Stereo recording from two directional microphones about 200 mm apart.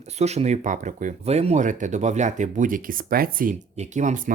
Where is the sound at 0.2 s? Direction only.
35° right (ahead or behind).